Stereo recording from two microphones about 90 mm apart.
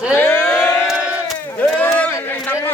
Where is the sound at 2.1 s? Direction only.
25° left (ahead or behind).